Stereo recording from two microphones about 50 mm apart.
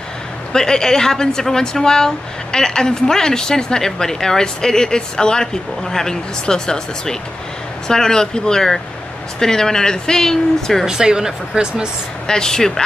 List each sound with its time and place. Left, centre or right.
0.5 s speech: centre
10.9 s speech: centre
12.3 s speech: centre